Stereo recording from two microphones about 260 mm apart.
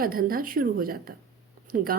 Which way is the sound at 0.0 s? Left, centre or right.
Right.